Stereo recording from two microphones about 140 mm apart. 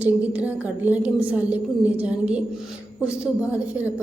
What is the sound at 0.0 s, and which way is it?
A woman's voice, 10° right (ahead or behind).